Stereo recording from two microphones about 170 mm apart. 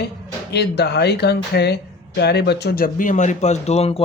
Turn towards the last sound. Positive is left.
turn(degrees=40)  # may be behind; listen again after turning